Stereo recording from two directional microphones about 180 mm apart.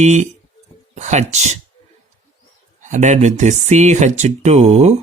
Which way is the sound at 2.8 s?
40° right (ahead or behind).